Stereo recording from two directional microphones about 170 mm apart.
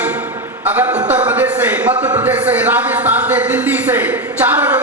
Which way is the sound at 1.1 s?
10° right (ahead or behind).